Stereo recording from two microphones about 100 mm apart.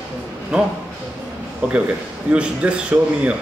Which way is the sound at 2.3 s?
10° right (ahead or behind).